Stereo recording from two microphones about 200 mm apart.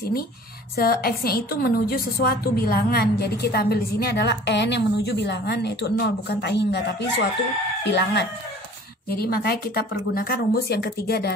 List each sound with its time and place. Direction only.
0.7 s a woman's voice: 50° left (ahead or behind)